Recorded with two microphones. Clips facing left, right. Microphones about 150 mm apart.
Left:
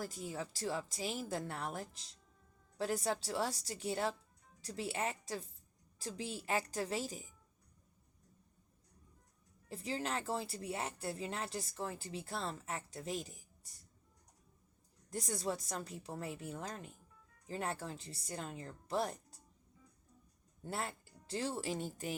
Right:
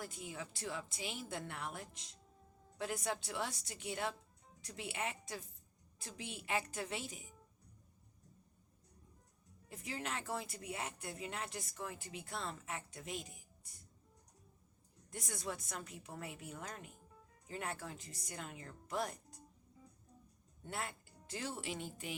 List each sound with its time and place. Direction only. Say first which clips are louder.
0.0 s speech: left 4 dB; 40° left (ahead or behind)
9.6 s speech: left 4 dB; 30° left (ahead or behind)
15.1 s speech: left 6 dB; 35° left (ahead or behind)
20.6 s speech: left 3 dB; 35° left (ahead or behind)